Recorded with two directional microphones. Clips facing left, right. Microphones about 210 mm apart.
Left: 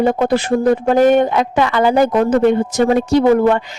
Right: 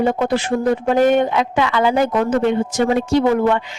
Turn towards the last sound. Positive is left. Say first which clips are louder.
# left 3 dB
turn(degrees=40)  # may be behind; listen again after turning